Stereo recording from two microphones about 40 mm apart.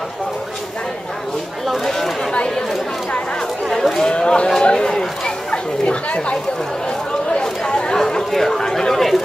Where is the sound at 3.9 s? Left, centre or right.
Left.